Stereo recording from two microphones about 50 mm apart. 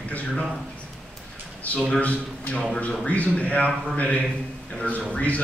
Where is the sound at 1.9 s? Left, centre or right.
Left.